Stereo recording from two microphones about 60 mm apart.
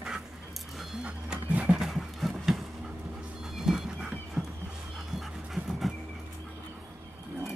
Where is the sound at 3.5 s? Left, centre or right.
Centre.